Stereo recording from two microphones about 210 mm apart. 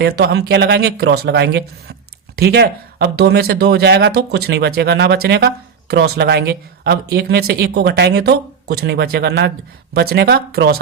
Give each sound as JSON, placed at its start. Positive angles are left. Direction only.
{"t": 0.0, "sound": "speech", "side_deg": -50}